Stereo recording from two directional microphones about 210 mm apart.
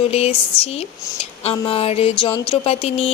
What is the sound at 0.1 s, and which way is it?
Speech, 30° left (ahead or behind).